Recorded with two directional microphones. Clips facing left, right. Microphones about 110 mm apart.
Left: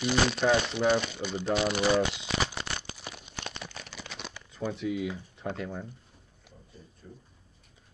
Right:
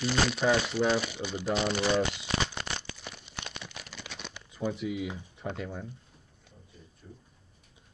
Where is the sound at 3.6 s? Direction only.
5° right (ahead or behind).